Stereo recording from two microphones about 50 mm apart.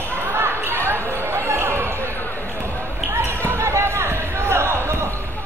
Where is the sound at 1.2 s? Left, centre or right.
Right.